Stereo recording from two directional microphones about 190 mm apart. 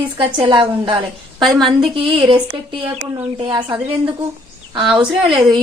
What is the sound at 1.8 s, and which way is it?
A woman's voice, 25° right (ahead or behind).